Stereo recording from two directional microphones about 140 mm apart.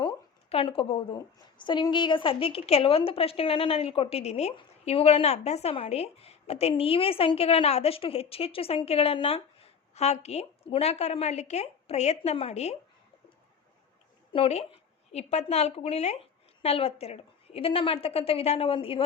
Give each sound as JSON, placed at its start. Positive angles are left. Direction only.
{"t": 0.0, "sound": "a woman's voice", "side_deg": 35}
{"t": 14.3, "sound": "speech", "side_deg": 45}